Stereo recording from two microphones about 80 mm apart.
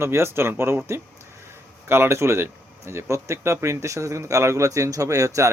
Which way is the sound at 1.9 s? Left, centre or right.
Right.